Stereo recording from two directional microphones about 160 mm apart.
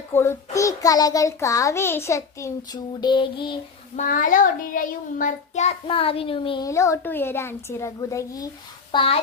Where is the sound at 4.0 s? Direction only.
55° left (ahead or behind); by 6.6 s 35° left (ahead or behind).